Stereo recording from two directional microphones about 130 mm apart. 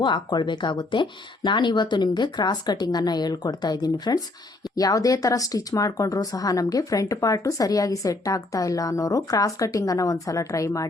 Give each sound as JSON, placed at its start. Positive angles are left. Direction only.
{"t": 0.0, "sound": "speech", "side_deg": 35}